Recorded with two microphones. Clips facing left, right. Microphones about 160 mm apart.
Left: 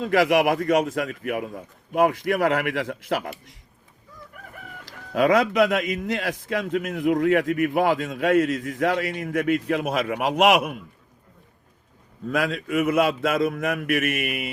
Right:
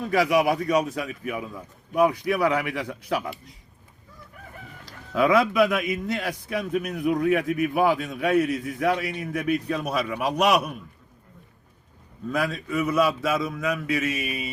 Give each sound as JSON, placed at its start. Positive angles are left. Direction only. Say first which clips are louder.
{"t": 0.0, "sound": "a man's voice", "louder": "left 2 dB", "side_deg": 85}
{"t": 1.0, "sound": "a man's voice", "louder": "left 3 dB", "side_deg": 65}
{"t": 5.1, "sound": "speech", "louder": "left 1 dB", "side_deg": 55}
{"t": 6.5, "sound": "a man's voice", "louder": "left 1 dB", "side_deg": 85}
{"t": 7.1, "sound": "a man's voice", "louder": "left 3 dB", "side_deg": 70}
{"t": 9.3, "sound": "a man's voice", "louder": "left 3 dB", "side_deg": 75}
{"t": 12.2, "sound": "a man's voice", "louder": "left 2 dB", "side_deg": 85}